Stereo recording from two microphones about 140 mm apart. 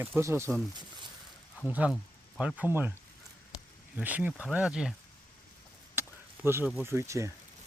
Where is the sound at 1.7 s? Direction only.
10° right (ahead or behind).